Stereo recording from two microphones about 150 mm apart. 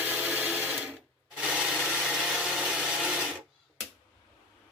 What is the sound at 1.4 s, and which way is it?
Wood, 5° right (ahead or behind).